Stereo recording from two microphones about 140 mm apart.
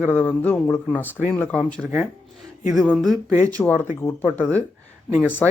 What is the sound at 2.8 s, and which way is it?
Speech, 5° left (ahead or behind).